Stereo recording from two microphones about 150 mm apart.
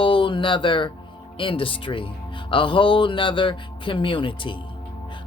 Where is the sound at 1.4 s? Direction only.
35° left (ahead or behind).